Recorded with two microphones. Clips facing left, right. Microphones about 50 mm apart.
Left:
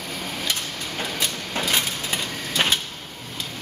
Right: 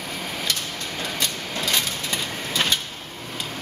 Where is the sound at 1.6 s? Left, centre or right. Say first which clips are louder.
Left 1 dB; centre.